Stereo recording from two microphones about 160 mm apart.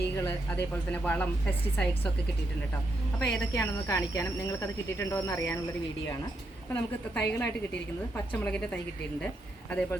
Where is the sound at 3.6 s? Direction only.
20° left (ahead or behind).